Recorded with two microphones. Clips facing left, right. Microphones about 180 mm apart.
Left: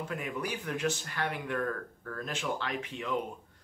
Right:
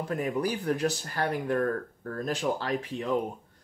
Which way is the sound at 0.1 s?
40° right (ahead or behind).